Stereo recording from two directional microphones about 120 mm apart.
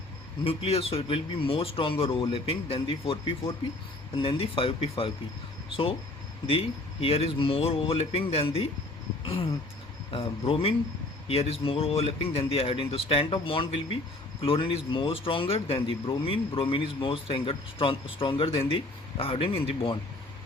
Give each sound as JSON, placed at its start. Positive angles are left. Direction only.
{"t": 0.4, "sound": "speech", "side_deg": 50}
{"t": 6.5, "sound": "speech", "side_deg": 50}